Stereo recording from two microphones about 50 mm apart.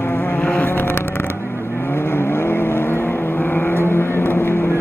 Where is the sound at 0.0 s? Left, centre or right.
Left.